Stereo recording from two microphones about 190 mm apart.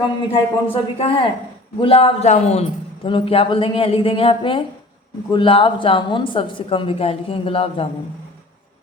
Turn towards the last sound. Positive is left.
turn(degrees=30)  # may be behind; listen again after turning